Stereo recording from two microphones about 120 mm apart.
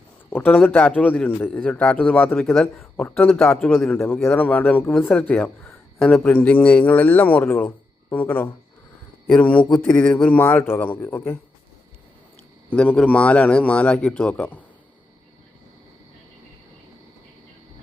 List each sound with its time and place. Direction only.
0.3 s a man's voice: 15° left (ahead or behind)
4.0 s a man's voice: 15° left (ahead or behind)
12.7 s a man's voice: 10° left (ahead or behind)